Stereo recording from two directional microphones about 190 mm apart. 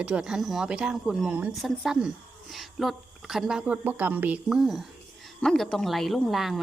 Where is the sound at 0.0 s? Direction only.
5° right (ahead or behind).